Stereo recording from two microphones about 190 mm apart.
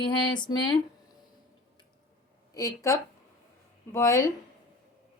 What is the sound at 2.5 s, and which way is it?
Speech, 15° left (ahead or behind).